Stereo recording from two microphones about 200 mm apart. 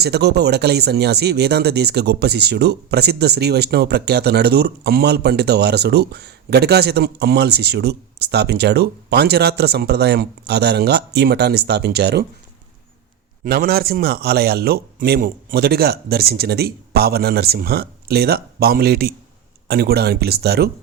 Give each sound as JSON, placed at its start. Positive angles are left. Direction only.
{"t": 0.0, "sound": "speech", "side_deg": -55}
{"t": 13.4, "sound": "speech", "side_deg": -45}